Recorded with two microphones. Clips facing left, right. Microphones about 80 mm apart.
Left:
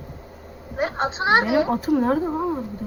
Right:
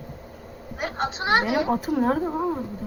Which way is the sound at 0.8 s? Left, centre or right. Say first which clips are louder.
Left 4 dB; left.